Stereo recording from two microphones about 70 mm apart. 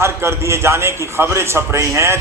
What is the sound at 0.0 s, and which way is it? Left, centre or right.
A man's voice, right.